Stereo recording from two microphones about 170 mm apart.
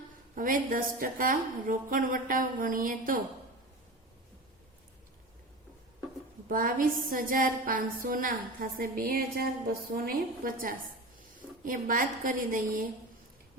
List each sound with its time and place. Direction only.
0.3 s a woman's voice: 55° right (ahead or behind)
6.5 s a woman's voice: 55° right (ahead or behind)